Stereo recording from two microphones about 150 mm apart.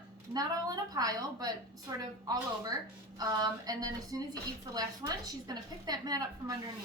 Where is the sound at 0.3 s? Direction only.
25° right (ahead or behind).